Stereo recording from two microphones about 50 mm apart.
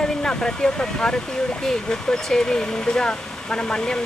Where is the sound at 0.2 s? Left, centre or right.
Centre.